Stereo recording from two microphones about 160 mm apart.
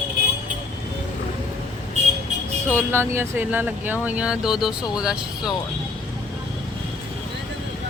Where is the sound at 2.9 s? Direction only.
15° right (ahead or behind).